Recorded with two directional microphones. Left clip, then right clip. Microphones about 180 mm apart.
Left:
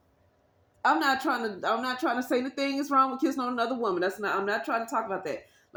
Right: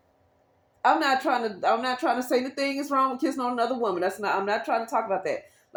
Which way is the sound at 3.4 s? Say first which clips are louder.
Right 3 dB; 20° right (ahead or behind).